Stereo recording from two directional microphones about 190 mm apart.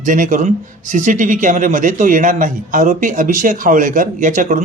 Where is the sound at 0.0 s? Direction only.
45° right (ahead or behind).